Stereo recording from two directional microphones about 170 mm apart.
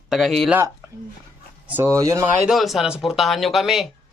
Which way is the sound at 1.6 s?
15° right (ahead or behind).